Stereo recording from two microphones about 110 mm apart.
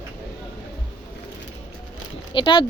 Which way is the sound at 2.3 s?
50° left (ahead or behind).